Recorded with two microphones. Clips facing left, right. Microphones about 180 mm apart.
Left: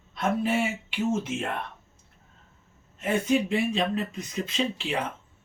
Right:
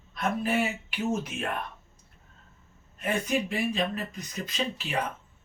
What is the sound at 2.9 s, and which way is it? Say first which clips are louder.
Speech: left 4 dB; 25° left (ahead or behind).